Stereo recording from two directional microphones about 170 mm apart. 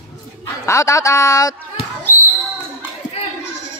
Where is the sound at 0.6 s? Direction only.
20° left (ahead or behind).